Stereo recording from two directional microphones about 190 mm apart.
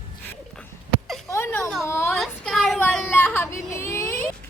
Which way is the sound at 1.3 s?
10° left (ahead or behind).